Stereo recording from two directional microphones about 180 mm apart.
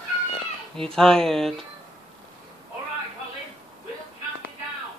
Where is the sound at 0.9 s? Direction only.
5° left (ahead or behind).